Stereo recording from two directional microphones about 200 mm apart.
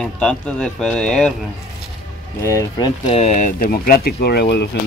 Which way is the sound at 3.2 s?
35° left (ahead or behind).